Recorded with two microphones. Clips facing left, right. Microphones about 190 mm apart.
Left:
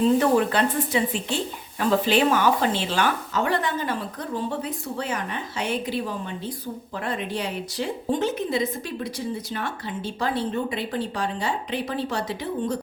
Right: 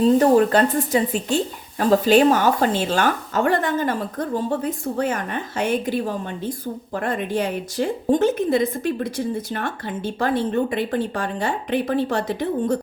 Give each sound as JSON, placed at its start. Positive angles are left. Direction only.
{"t": 0.0, "sound": "a woman's voice", "side_deg": -40}